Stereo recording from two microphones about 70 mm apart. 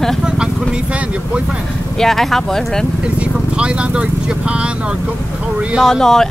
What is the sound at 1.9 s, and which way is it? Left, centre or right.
Speech, centre.